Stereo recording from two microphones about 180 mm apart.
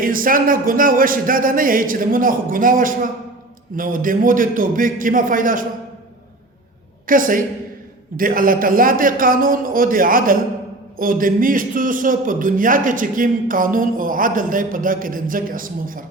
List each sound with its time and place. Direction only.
0.0 s a man's voice: 50° right (ahead or behind)
7.1 s a man's voice: 50° right (ahead or behind)